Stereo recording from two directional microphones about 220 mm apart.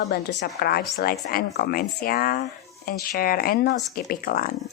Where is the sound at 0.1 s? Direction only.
50° left (ahead or behind).